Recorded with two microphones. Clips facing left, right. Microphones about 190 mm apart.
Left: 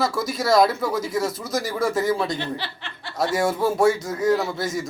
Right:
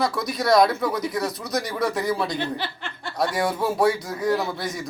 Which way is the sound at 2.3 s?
50° right (ahead or behind).